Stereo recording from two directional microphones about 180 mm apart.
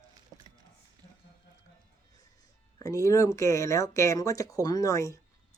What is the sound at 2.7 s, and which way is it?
Speech, 20° left (ahead or behind).